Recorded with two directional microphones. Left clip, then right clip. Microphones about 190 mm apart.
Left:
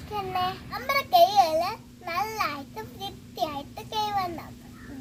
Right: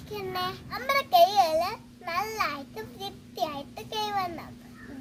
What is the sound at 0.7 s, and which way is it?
A child's voice, 5° right (ahead or behind).